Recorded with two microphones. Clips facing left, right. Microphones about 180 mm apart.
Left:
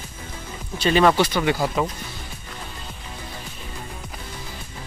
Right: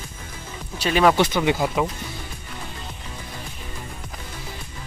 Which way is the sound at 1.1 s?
20° right (ahead or behind).